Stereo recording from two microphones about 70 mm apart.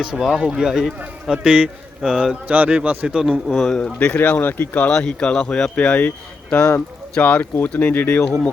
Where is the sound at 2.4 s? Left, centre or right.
Right.